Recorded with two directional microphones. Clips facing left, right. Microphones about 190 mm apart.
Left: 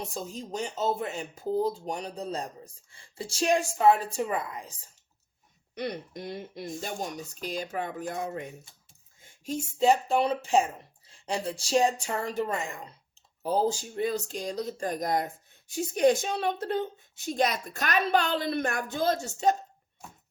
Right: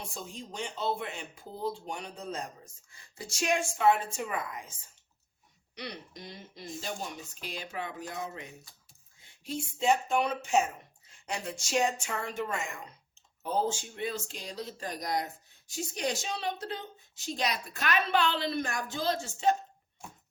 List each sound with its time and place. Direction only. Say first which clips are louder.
0.1 s speech: left 7 dB; 40° left (ahead or behind)
5.7 s speech: left 8 dB; 50° left (ahead or behind)
7.4 s speech: left 6 dB; 45° left (ahead or behind)